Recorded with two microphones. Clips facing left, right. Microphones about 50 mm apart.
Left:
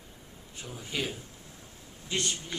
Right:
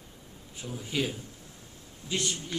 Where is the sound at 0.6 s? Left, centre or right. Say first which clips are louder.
Right 3 dB; centre.